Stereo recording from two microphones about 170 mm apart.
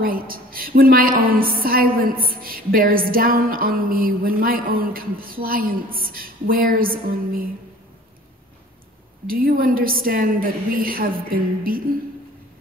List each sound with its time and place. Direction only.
0.0 s a woman's voice: 60° right (ahead or behind)
9.3 s a woman's voice: 60° right (ahead or behind)